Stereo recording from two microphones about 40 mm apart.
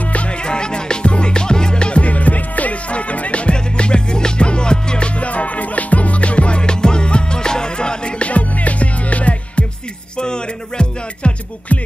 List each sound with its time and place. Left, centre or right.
0.0 s music: left
8.3 s music: left
10.1 s music: left
11.7 s music: left